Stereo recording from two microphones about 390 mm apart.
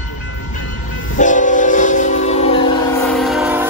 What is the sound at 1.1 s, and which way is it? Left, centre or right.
Train, centre.